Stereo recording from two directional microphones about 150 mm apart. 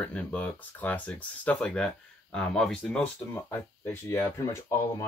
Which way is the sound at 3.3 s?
15° left (ahead or behind).